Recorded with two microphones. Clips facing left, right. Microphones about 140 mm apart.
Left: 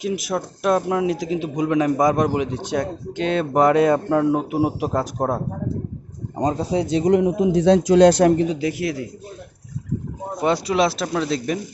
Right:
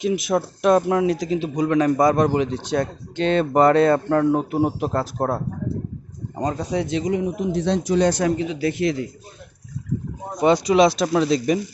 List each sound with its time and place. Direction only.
0.0 s speech: 5° left (ahead or behind)
6.3 s speech: 25° left (ahead or behind)
7.0 s a man's voice: 75° left (ahead or behind)
7.9 s a man's voice: 90° left
8.5 s speech: 10° left (ahead or behind)
10.3 s speech: 5° left (ahead or behind)